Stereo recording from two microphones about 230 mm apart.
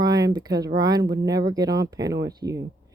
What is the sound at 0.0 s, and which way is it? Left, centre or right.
Speech, centre.